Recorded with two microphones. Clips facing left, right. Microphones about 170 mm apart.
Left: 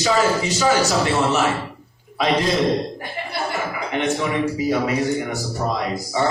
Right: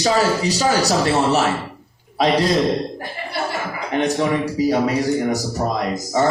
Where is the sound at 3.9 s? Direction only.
35° right (ahead or behind).